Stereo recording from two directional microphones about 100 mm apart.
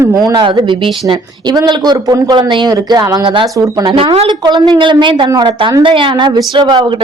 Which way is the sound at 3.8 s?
65° right (ahead or behind).